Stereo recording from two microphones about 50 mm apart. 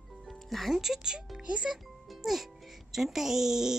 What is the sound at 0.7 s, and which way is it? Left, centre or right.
Speech, centre.